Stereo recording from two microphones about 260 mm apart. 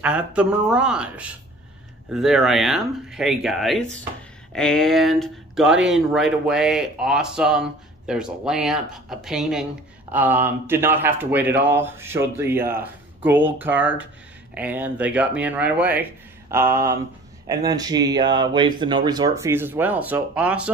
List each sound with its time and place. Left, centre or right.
0.0 s speech: centre